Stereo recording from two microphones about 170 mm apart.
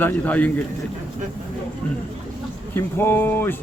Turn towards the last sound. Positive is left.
turn(degrees=10)  # may be behind; listen again after turning